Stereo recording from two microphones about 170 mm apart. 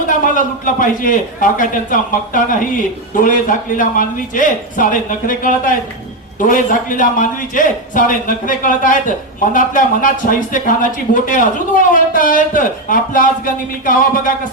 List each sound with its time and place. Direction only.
0.1 s a man's voice: 50° left (ahead or behind)